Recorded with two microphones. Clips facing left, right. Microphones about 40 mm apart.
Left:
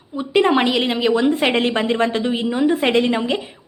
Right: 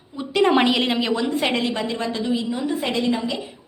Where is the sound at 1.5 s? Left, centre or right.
Left.